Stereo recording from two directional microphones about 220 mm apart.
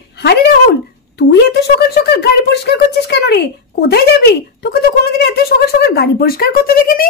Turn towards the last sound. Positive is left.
turn(degrees=40)  # may be behind; listen again after turning